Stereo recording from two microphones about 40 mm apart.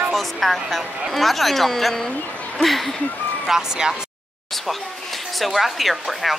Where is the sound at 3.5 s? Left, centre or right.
Centre.